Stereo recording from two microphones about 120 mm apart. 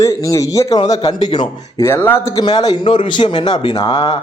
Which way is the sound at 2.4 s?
35° left (ahead or behind).